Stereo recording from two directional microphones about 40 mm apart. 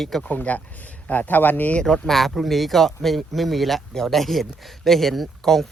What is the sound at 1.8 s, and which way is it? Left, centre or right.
Speech, centre.